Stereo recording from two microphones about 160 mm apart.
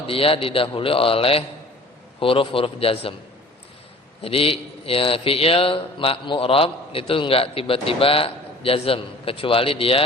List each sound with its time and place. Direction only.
0.1 s speech: 35° left (ahead or behind)
4.2 s speech: 35° left (ahead or behind)